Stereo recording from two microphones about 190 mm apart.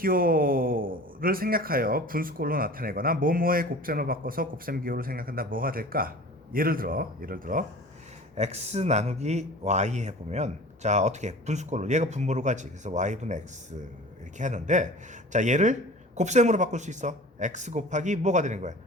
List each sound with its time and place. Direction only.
0.0 s speech: 50° right (ahead or behind)
8.4 s speech: 35° right (ahead or behind)